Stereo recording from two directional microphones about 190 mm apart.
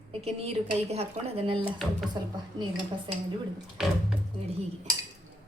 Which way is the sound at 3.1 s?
25° right (ahead or behind).